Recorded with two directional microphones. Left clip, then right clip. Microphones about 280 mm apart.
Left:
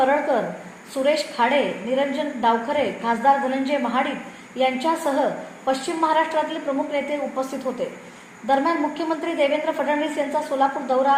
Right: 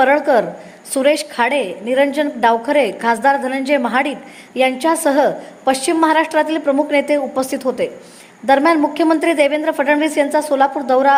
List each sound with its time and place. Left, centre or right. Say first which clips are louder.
0.0 s a woman's voice: right 7 dB; right